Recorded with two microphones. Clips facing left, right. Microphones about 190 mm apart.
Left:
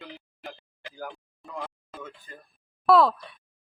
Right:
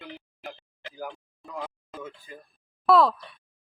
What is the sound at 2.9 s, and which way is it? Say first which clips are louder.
Speech: even; centre (ahead or behind).